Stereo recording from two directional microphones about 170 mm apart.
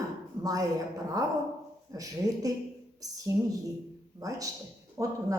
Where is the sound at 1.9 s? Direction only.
20° right (ahead or behind).